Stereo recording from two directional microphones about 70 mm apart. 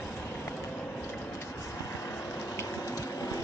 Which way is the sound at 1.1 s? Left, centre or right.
Left.